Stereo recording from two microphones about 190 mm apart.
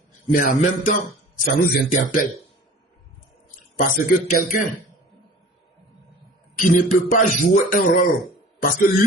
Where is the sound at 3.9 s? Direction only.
45° left (ahead or behind).